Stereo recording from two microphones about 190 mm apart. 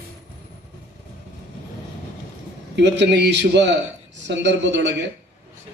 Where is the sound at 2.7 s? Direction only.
65° right (ahead or behind).